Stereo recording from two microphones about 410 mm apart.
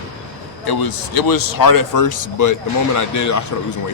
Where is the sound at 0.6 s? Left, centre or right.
Left.